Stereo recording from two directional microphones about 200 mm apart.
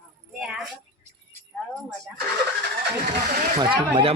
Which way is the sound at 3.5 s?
25° right (ahead or behind).